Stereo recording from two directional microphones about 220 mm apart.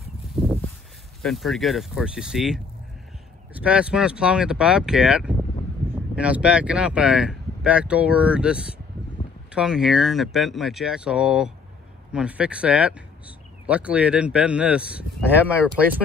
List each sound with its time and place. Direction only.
1.2 s speech: centre (ahead or behind)